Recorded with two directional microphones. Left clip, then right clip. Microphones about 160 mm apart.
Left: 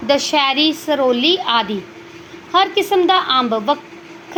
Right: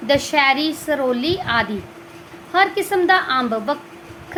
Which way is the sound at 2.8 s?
5° left (ahead or behind).